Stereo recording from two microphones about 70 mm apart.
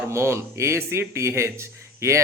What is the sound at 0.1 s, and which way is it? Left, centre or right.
Speech, right.